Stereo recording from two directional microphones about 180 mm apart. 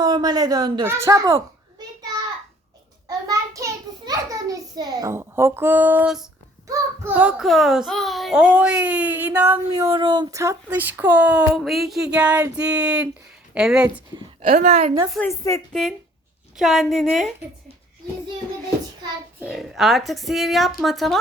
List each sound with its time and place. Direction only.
0.0 s speech: 20° right (ahead or behind)
3.1 s a sound: 20° right (ahead or behind)
6.7 s a child's voice: 10° right (ahead or behind)
9.9 s a child's voice: 25° right (ahead or behind); by 13.8 s 5° right (ahead or behind)
14.4 s a woman's voice: 50° right (ahead or behind)
14.7 s a woman's voice: 35° right (ahead or behind)
15.3 s a woman's voice: 15° left (ahead or behind)
15.7 s a woman's voice: centre (ahead or behind)
19.4 s a woman's voice: centre (ahead or behind)